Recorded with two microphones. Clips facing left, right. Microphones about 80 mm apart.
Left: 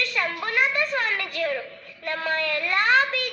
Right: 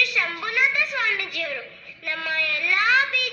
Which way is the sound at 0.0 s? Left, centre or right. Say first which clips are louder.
Right 1 dB; left.